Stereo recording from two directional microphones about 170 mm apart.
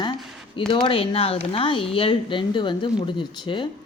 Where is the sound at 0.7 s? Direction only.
30° left (ahead or behind).